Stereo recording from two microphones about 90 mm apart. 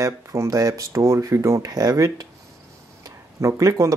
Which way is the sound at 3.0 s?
35° right (ahead or behind).